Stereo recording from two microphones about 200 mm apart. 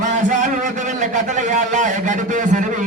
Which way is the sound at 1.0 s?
40° right (ahead or behind).